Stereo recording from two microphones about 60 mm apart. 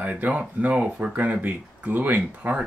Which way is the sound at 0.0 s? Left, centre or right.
Right.